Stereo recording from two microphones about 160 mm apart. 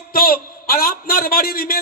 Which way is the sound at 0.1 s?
65° left (ahead or behind).